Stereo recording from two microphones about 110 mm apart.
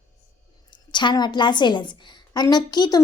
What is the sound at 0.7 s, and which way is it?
A woman's voice, 45° left (ahead or behind).